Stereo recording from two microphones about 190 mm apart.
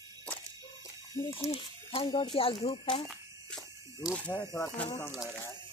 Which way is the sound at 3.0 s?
Centre (ahead or behind).